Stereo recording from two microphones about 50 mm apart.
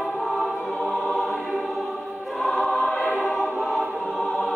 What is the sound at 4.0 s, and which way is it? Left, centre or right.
Music, centre.